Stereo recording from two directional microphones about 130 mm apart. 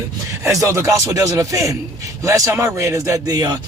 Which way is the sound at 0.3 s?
25° right (ahead or behind).